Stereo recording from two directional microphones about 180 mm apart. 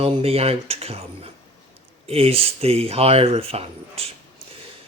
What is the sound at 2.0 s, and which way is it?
Speech, 35° right (ahead or behind).